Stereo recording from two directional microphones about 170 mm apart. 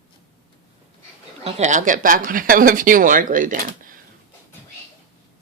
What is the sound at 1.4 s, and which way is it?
Speech, 40° right (ahead or behind).